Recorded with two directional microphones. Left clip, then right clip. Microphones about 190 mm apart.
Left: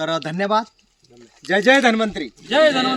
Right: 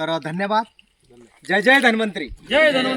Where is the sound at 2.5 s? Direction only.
25° right (ahead or behind).